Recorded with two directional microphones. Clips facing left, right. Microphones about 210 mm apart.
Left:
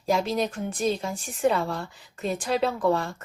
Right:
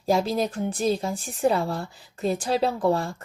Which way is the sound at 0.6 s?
35° right (ahead or behind).